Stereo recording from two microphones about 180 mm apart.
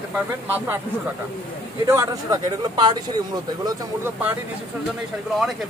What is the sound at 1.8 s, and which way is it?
Speech, 15° right (ahead or behind).